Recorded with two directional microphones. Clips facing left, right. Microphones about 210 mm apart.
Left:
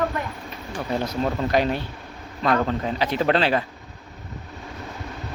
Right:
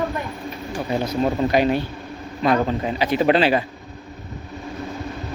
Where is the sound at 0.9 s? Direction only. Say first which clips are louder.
Right 3 dB; 10° right (ahead or behind).